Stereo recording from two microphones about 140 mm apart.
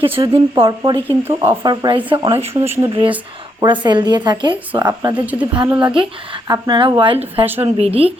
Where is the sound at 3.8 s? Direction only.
30° right (ahead or behind).